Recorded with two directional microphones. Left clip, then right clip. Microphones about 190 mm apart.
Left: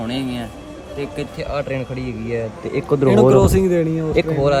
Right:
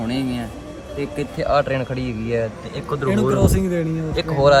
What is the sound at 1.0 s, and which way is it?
Speech, 25° right (ahead or behind).